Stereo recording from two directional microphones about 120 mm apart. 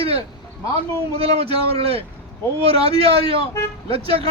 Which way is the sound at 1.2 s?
55° right (ahead or behind).